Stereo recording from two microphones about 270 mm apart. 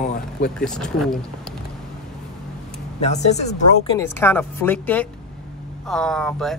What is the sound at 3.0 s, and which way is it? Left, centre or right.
Speech, left.